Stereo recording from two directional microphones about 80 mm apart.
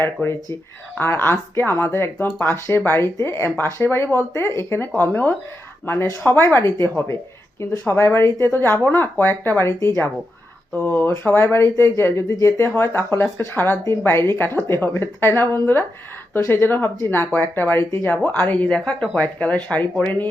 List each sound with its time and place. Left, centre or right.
0.0 s a woman's voice: left